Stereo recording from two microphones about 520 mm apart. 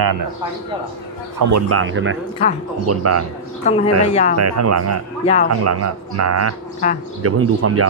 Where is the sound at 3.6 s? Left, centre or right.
Centre.